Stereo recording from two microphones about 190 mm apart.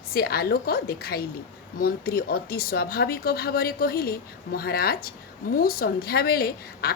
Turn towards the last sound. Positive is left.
turn(degrees=55)  # may be behind; listen again after turning